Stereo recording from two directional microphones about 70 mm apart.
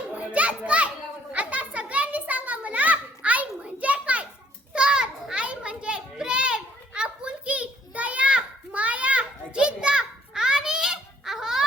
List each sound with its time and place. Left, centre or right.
0.2 s children playing: right